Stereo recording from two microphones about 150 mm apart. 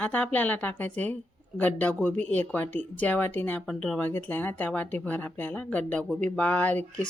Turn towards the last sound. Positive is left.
turn(degrees=10)  # may be behind; listen again after turning